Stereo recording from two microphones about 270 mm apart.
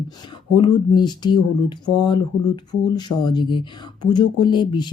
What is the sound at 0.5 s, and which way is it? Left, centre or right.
Speech, centre.